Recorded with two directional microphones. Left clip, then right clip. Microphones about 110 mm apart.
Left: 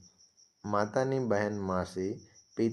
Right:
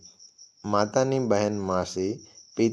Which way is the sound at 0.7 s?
30° right (ahead or behind).